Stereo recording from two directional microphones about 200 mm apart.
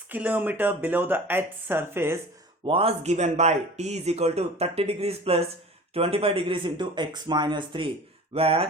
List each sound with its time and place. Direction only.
0.1 s speech: 10° right (ahead or behind)
2.6 s speech: 30° right (ahead or behind)